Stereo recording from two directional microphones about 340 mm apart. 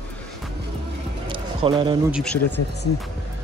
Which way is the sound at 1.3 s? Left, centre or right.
Centre.